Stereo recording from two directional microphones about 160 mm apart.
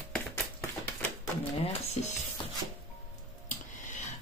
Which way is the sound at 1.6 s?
45° left (ahead or behind).